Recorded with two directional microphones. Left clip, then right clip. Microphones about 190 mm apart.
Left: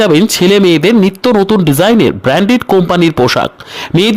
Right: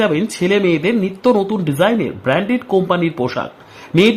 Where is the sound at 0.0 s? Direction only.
50° left (ahead or behind).